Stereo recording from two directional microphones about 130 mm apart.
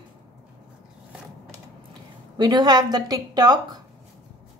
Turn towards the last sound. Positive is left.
turn(degrees=-30)  # may be behind; listen again after turning